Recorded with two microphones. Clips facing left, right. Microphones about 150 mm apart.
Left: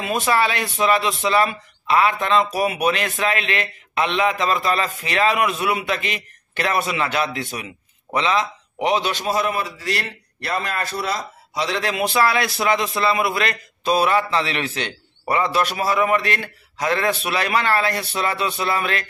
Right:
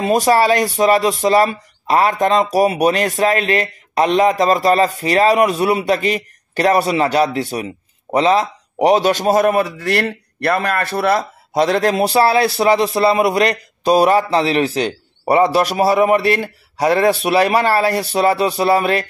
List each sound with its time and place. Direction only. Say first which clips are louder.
0.0 s a man's voice: right 7 dB; 40° right (ahead or behind)